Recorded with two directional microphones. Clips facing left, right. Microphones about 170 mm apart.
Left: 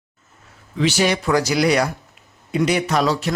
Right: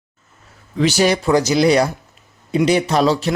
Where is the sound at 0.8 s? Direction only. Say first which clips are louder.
Right 3 dB; 40° right (ahead or behind).